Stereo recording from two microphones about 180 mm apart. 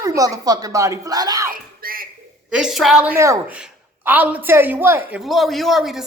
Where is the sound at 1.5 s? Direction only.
55° right (ahead or behind).